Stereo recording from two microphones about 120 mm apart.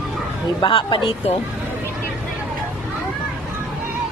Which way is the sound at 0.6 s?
40° left (ahead or behind).